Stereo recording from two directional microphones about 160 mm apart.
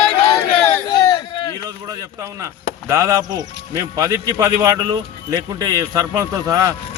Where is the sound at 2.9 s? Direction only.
20° right (ahead or behind).